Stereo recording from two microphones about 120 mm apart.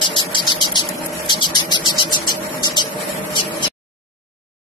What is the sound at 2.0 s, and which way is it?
Vehicle, 40° left (ahead or behind).